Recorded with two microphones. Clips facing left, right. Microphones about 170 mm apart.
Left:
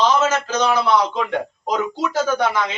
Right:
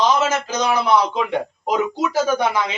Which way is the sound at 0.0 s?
15° right (ahead or behind).